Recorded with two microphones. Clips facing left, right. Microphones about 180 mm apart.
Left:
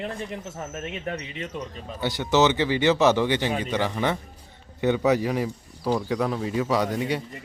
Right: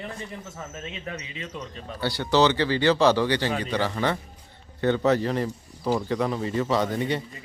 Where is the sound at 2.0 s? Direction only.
20° left (ahead or behind).